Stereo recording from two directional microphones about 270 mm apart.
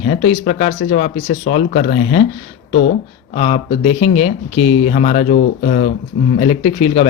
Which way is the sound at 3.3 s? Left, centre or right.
Left.